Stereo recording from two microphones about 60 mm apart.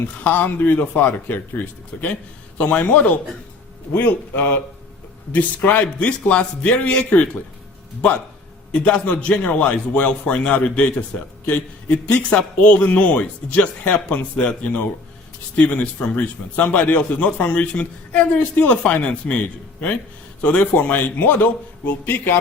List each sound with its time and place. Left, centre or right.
0.3 s a man's voice: left
3.9 s a man's voice: left
8.7 s a man's voice: left